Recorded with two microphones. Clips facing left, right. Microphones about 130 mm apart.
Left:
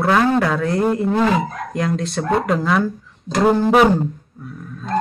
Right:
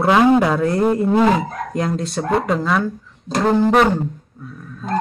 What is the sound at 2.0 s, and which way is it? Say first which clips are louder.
Speech: even; centre (ahead or behind).